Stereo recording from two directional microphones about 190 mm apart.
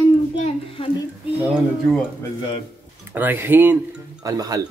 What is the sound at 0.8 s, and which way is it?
Speech, 30° left (ahead or behind).